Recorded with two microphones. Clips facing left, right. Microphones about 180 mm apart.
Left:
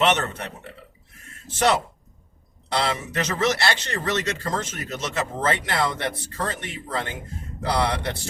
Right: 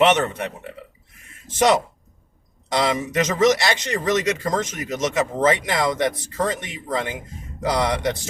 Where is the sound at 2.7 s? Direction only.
15° right (ahead or behind).